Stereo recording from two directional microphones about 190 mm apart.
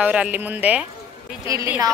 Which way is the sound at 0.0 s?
5° right (ahead or behind).